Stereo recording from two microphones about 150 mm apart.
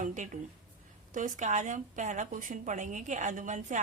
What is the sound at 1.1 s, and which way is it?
A woman's voice, 55° right (ahead or behind).